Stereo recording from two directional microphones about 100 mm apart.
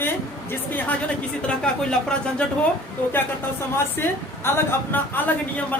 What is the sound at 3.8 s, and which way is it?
A woman's voice, 25° left (ahead or behind).